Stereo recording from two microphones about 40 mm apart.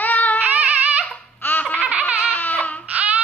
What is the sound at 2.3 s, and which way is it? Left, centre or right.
Baby cry, left.